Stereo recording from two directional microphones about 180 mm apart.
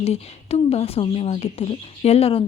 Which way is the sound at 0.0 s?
35° left (ahead or behind).